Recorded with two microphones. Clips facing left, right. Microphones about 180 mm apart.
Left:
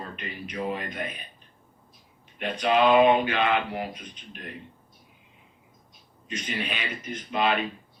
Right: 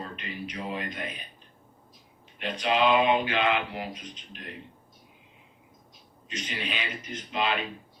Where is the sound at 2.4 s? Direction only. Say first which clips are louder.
Left 3 dB; 50° left (ahead or behind).